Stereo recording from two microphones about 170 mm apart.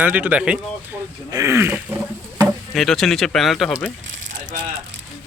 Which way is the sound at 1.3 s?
20° right (ahead or behind).